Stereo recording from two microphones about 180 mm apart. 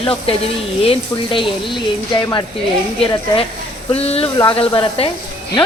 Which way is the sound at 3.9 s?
35° left (ahead or behind).